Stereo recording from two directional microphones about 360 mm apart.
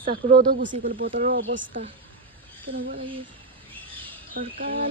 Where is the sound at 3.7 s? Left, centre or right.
Centre.